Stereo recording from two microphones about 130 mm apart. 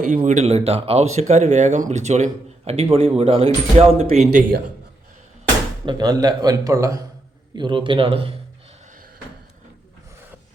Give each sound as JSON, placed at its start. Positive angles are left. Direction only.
{"t": 0.3, "sound": "speech", "side_deg": -60}
{"t": 4.1, "sound": "speech", "side_deg": -60}
{"t": 5.8, "sound": "a man's voice", "side_deg": -35}
{"t": 7.5, "sound": "speech", "side_deg": -35}